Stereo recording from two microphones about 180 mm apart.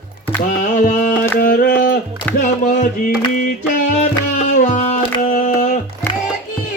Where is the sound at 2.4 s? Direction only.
45° left (ahead or behind).